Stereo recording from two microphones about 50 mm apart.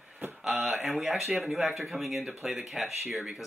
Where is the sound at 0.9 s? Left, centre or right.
Centre.